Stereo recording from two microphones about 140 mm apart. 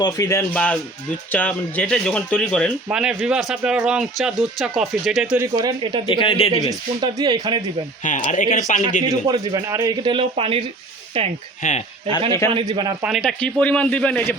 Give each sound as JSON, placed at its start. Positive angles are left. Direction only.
{"t": 0.0, "sound": "speech", "side_deg": 25}
{"t": 0.5, "sound": "speech", "side_deg": 10}
{"t": 2.9, "sound": "a man's voice", "side_deg": -5}
{"t": 5.5, "sound": "a man's voice", "side_deg": -30}
{"t": 6.1, "sound": "a man's voice", "side_deg": 40}
{"t": 6.6, "sound": "a man's voice", "side_deg": -25}
{"t": 8.0, "sound": "speech", "side_deg": 60}
{"t": 9.0, "sound": "a man's voice", "side_deg": -30}
{"t": 11.6, "sound": "speech", "side_deg": 65}
{"t": 12.5, "sound": "a man's voice", "side_deg": -35}
{"t": 13.0, "sound": "a man's voice", "side_deg": 0}
{"t": 13.4, "sound": "speech", "side_deg": 10}